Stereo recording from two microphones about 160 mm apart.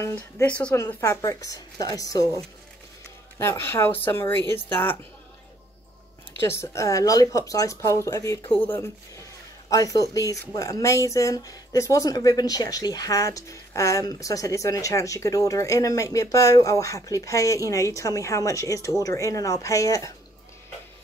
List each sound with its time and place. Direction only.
0.0 s speech: 15° left (ahead or behind)
6.4 s speech: 15° left (ahead or behind)